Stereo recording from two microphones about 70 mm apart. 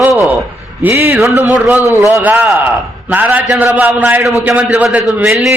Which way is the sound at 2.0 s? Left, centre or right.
Right.